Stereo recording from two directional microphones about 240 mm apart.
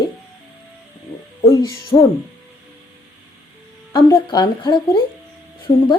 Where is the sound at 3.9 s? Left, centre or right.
Centre.